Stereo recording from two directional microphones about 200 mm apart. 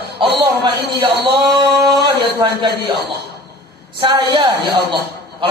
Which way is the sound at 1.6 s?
20° right (ahead or behind).